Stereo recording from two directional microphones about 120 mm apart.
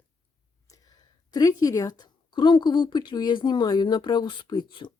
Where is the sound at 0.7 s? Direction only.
35° left (ahead or behind).